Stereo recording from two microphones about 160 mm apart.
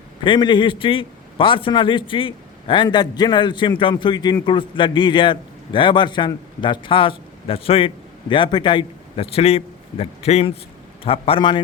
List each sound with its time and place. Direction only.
0.3 s a man's voice: 30° left (ahead or behind)